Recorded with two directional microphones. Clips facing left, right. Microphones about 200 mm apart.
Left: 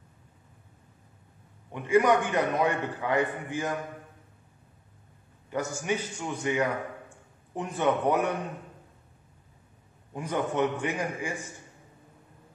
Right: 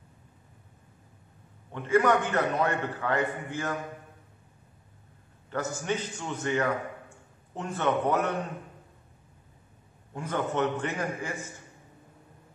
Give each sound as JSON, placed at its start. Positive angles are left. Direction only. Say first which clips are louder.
{"t": 1.7, "sound": "a man's voice", "louder": "left 1 dB", "side_deg": 15}
{"t": 5.5, "sound": "a man's voice", "louder": "left 1 dB", "side_deg": 10}
{"t": 10.1, "sound": "a man's voice", "louder": "left 1 dB", "side_deg": 15}